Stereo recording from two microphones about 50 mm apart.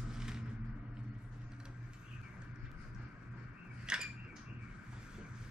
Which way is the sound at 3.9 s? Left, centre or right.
Centre.